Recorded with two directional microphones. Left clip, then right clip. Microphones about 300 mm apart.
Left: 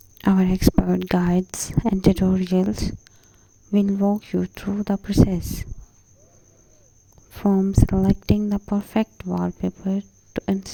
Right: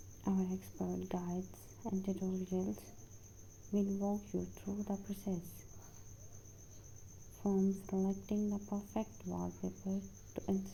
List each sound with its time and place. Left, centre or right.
0.2 s a woman's voice: left
7.3 s a woman's voice: left